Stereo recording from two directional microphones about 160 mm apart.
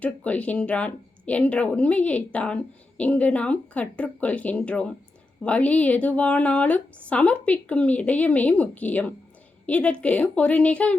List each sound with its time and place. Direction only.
0.0 s a woman's voice: 10° left (ahead or behind)